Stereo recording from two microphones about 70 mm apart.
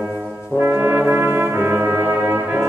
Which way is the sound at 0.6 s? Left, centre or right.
Right.